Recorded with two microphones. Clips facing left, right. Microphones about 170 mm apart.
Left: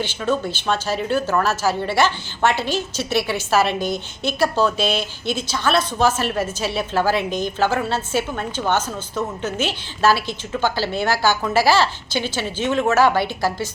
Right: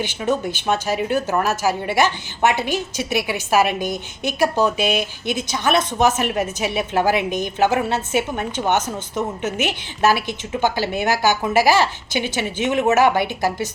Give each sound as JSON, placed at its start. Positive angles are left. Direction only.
{"t": 0.0, "sound": "a woman's voice", "side_deg": -15}